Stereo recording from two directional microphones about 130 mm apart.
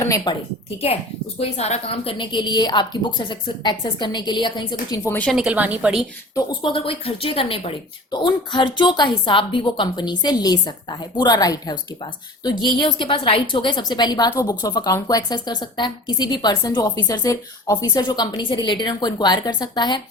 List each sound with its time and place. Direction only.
1.4 s a woman's voice: 55° left (ahead or behind); by 4.9 s 35° left (ahead or behind)
5.0 s speech: 15° left (ahead or behind)
5.3 s a woman's voice: 5° right (ahead or behind)
6.3 s a woman's voice: 40° left (ahead or behind)